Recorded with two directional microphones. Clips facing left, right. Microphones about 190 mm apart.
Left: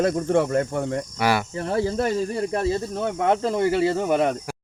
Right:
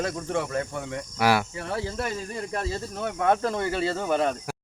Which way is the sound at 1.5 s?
40° left (ahead or behind).